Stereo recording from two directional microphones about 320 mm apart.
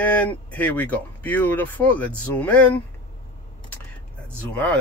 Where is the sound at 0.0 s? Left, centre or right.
Centre.